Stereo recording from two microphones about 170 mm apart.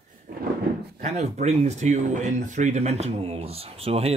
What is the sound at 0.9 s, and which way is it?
Speech, 45° right (ahead or behind).